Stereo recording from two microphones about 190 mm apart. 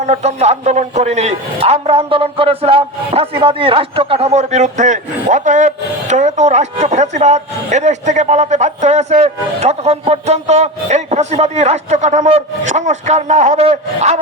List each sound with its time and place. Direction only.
0.0 s a man's voice: 35° right (ahead or behind)